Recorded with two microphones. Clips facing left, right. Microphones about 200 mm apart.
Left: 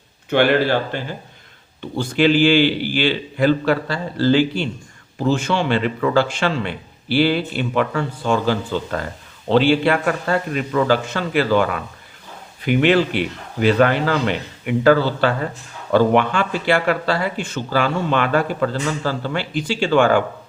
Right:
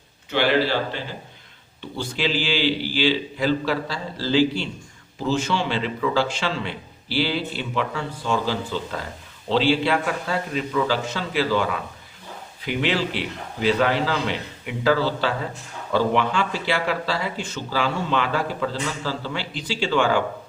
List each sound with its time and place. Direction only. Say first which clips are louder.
0.3 s speech: left 5 dB; 55° left (ahead or behind)